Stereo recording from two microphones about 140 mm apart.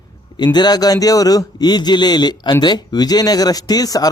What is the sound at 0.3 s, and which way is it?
A man's voice, 30° left (ahead or behind).